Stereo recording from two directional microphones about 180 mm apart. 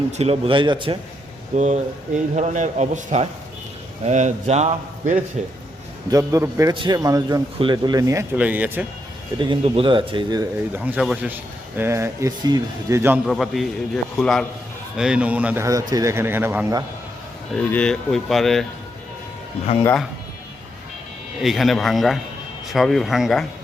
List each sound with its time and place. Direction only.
0.2 s a man's voice: 35° right (ahead or behind)
1.5 s a man's voice: 40° right (ahead or behind)
6.1 s a man's voice: 20° right (ahead or behind)
9.4 s a man's voice: 25° right (ahead or behind)
10.7 s a man's voice: 10° right (ahead or behind)
13.2 s a man's voice: centre (ahead or behind)
17.5 s a man's voice: 5° left (ahead or behind)
21.4 s a man's voice: centre (ahead or behind)